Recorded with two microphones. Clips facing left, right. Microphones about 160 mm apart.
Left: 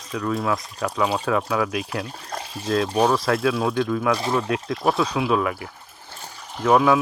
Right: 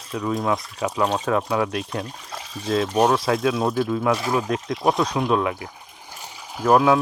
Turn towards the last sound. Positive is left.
turn(degrees=-5)  # may be behind; listen again after turning